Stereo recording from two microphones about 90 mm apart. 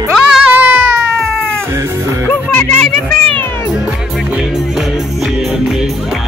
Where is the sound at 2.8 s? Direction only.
10° left (ahead or behind).